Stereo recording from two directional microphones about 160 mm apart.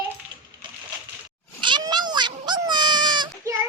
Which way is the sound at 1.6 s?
30° right (ahead or behind).